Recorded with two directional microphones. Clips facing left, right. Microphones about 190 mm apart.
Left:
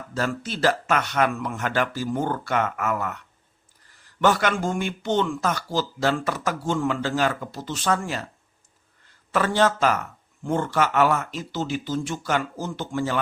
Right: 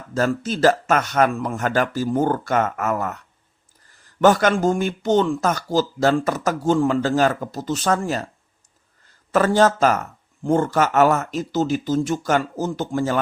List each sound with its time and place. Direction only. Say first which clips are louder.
0.1 s speech: right 6 dB; 45° right (ahead or behind)
4.2 s speech: right 6 dB; 40° right (ahead or behind)
9.3 s speech: right 5 dB; 40° right (ahead or behind)